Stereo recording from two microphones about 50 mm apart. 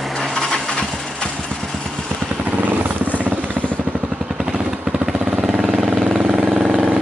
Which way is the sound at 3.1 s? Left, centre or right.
Right.